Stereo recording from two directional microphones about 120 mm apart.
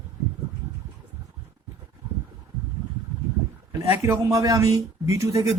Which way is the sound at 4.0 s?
25° right (ahead or behind).